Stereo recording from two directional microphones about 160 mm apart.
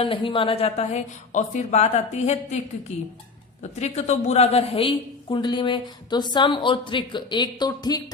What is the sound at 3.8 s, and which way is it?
A woman's voice, 45° left (ahead or behind).